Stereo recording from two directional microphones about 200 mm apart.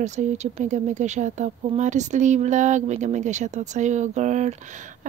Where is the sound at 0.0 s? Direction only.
35° right (ahead or behind).